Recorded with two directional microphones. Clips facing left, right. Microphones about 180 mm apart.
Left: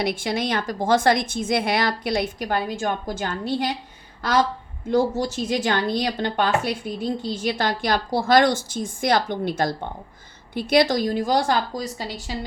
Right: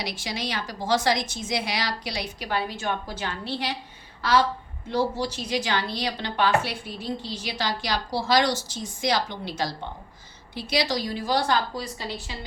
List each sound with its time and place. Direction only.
0.0 s a woman's voice: 55° left (ahead or behind)
4.9 s a woman's voice: 45° left (ahead or behind)